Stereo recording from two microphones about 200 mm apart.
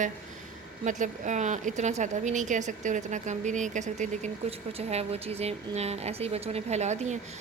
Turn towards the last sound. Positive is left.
turn(degrees=-35)  # may be behind; listen again after turning